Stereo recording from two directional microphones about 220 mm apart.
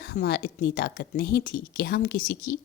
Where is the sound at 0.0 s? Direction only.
50° left (ahead or behind).